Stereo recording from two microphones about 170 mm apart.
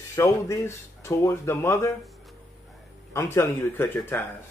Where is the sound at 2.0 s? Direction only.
Centre (ahead or behind).